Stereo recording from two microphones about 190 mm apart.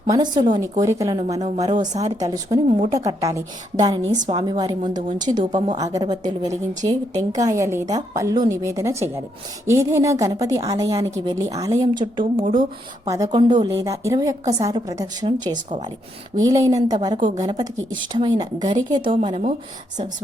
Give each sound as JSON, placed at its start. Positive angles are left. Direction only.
{"t": 0.1, "sound": "a woman's voice", "side_deg": -20}